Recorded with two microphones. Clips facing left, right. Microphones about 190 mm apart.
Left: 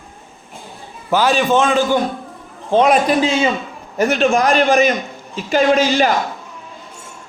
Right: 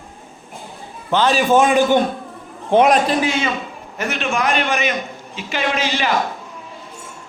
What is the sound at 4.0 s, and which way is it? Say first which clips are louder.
A man's voice: left 7 dB; 35° left (ahead or behind).